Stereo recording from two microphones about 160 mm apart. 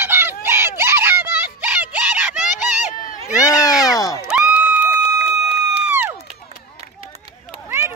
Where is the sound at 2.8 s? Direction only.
50° left (ahead or behind).